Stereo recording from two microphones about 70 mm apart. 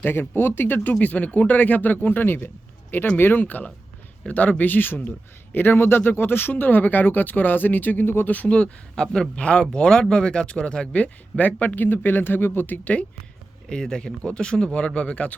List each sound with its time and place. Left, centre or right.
0.0 s speech: left
13.7 s speech: centre